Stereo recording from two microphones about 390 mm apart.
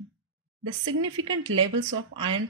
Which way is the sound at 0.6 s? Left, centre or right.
Right.